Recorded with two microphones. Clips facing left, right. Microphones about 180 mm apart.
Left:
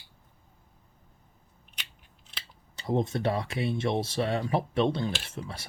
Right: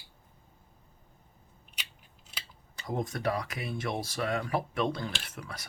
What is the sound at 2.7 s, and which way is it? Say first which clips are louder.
Speech: left 6 dB; 25° left (ahead or behind).